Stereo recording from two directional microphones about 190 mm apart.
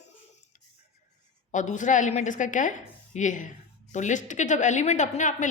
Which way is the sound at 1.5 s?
40° left (ahead or behind).